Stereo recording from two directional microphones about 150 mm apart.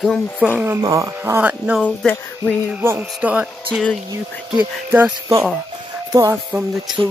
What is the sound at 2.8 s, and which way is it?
Speech, 15° right (ahead or behind).